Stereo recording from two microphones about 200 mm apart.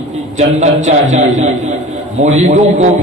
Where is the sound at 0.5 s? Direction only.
35° right (ahead or behind).